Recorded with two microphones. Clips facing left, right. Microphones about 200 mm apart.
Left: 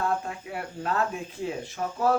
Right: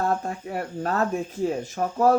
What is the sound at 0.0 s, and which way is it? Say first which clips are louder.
Speech: right 3 dB; 40° right (ahead or behind).